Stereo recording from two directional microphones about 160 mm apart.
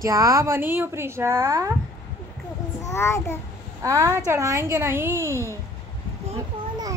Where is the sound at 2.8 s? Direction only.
15° left (ahead or behind).